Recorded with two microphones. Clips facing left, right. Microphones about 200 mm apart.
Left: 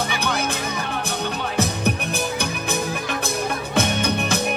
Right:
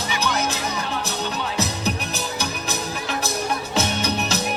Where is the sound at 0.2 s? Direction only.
55° left (ahead or behind).